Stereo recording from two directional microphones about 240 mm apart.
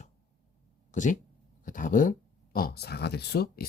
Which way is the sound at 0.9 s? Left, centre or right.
Left.